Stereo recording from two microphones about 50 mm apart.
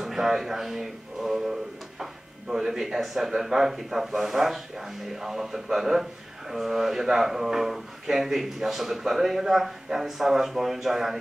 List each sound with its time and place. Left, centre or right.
0.0 s speech: centre